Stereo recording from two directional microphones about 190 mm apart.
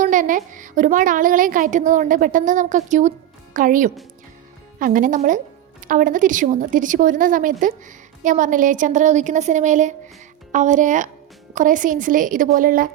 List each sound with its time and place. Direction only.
0.0 s a woman's voice: 45° right (ahead or behind)